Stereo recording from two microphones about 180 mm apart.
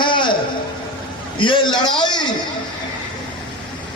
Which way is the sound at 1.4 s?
30° left (ahead or behind).